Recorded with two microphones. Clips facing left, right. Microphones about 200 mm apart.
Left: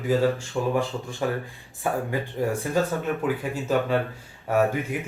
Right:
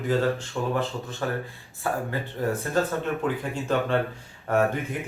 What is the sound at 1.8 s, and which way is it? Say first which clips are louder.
Speech: left 2 dB; 15° left (ahead or behind).